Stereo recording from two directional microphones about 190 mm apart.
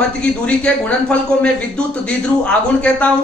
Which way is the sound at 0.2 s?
5° left (ahead or behind).